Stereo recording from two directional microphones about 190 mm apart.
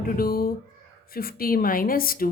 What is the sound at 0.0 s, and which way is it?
A woman's voice, 50° left (ahead or behind).